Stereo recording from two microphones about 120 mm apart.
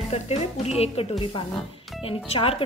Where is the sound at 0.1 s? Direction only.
60° left (ahead or behind).